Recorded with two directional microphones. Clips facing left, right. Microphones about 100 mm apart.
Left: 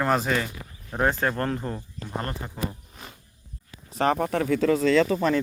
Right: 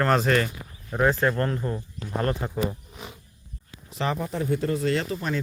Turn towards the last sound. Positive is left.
turn(degrees=90)